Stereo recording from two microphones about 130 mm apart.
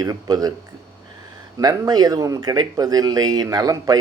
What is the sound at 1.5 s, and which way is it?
A man's voice, 30° right (ahead or behind).